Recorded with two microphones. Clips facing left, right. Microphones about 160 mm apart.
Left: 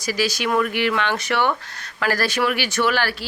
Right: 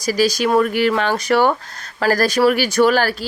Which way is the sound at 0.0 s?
40° right (ahead or behind).